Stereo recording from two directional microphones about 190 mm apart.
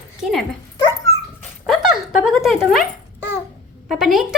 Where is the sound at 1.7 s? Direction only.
Centre (ahead or behind).